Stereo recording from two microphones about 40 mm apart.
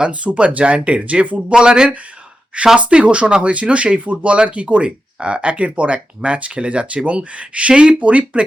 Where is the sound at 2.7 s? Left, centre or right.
Right.